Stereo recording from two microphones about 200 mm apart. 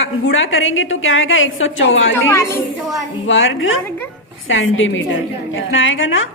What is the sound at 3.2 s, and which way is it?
A woman's voice, 70° left (ahead or behind).